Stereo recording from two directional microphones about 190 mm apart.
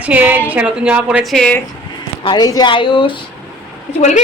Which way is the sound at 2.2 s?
20° left (ahead or behind).